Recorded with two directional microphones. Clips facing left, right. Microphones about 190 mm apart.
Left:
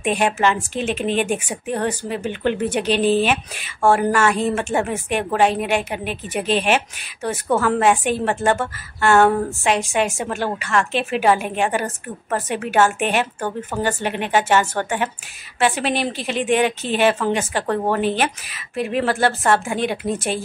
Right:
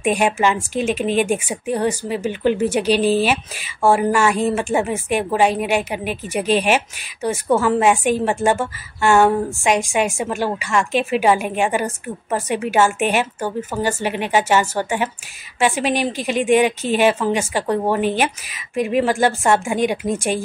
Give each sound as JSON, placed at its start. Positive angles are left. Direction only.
{"t": 0.0, "sound": "a woman's voice", "side_deg": -10}